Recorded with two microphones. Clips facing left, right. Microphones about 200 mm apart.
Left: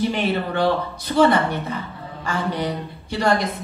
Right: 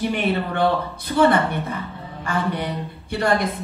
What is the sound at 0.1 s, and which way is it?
A woman's voice, 55° right (ahead or behind).